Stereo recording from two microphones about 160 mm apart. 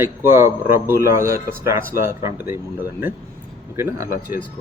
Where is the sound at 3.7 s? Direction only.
15° right (ahead or behind).